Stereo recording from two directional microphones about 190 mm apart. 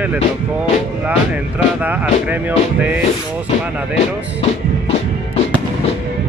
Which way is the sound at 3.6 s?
5° right (ahead or behind).